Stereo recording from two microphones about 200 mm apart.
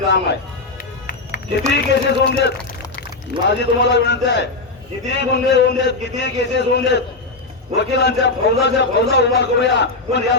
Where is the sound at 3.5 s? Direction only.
60° left (ahead or behind).